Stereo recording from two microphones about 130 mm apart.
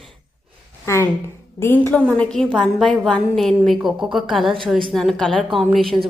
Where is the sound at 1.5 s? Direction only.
15° left (ahead or behind).